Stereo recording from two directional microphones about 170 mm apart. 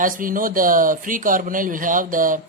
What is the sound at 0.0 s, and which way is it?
Speech, 55° right (ahead or behind).